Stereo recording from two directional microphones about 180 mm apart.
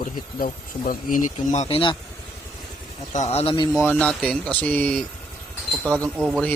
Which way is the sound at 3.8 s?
10° left (ahead or behind).